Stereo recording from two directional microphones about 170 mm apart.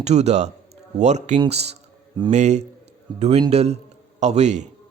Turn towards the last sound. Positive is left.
turn(degrees=-40)  # may be behind; listen again after turning